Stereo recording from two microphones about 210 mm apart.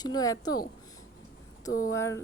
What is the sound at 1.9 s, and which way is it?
Speech, 15° left (ahead or behind).